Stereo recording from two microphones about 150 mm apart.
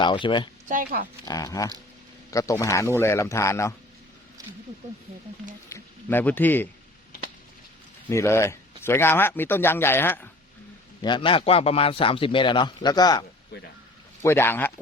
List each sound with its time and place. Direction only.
0.0 s a man's voice: 30° left (ahead or behind)
0.7 s speech: 70° right (ahead or behind)
1.2 s a man's voice: 25° left (ahead or behind)
5.6 s speech: 15° left (ahead or behind)
8.1 s speech: 20° left (ahead or behind)
11.0 s a man's voice: 35° left (ahead or behind)
13.5 s speech: 90° left
14.2 s speech: 15° left (ahead or behind)